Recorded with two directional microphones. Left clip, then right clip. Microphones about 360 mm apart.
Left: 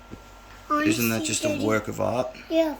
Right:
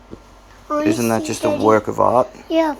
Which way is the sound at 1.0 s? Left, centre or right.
Centre.